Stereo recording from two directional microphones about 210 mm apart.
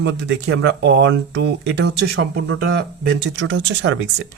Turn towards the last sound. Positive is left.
turn(degrees=-60)  # may be behind; listen again after turning